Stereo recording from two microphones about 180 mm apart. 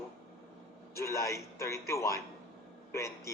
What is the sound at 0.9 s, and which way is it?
Speech, 15° left (ahead or behind).